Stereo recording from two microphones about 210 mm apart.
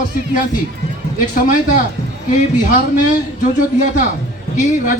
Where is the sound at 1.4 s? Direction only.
40° left (ahead or behind).